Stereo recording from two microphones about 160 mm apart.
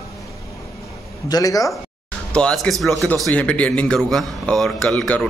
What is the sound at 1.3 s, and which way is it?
Speech, 20° left (ahead or behind).